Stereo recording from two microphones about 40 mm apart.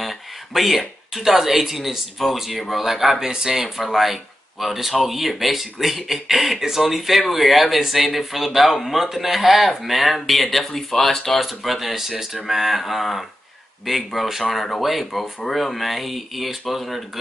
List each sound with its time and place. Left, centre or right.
0.0 s speech: centre
11.3 s speech: centre